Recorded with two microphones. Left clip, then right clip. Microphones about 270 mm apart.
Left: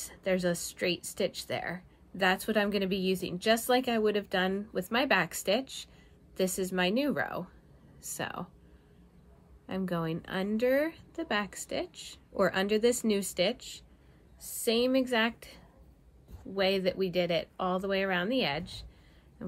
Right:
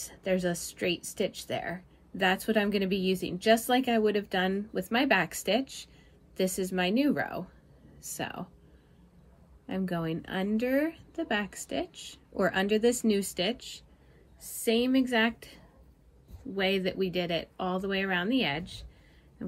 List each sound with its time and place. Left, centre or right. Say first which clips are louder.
0.1 s a woman's voice: even; centre
9.7 s a woman's voice: right 1 dB; centre
11.9 s speech: right 1 dB; centre
12.4 s a woman's voice: even; centre
14.6 s a woman's voice: even; centre
16.5 s a woman's voice: even; centre